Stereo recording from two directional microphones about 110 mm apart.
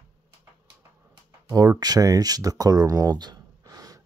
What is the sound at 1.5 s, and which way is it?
Speech, 35° right (ahead or behind).